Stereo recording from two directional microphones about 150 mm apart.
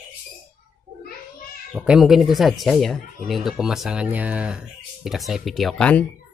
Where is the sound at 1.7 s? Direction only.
5° right (ahead or behind).